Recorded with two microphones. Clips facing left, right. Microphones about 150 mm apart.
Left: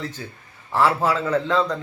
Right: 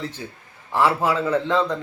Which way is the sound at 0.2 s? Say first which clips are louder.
Right 1 dB; 20° right (ahead or behind).